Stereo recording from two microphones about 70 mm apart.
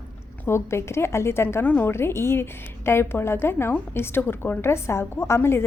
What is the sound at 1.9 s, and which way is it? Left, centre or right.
A woman's voice, left.